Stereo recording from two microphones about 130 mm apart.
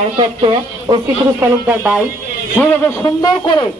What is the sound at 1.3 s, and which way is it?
Speech, 10° right (ahead or behind).